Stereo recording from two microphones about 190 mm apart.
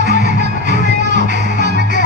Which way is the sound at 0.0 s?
60° right (ahead or behind).